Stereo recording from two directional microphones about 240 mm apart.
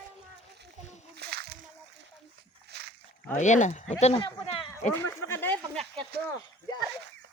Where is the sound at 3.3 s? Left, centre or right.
Left.